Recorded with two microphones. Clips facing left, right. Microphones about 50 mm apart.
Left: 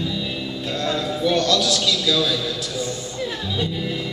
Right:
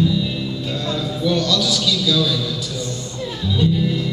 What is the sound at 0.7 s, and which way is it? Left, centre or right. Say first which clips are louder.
Music: left 3 dB; centre.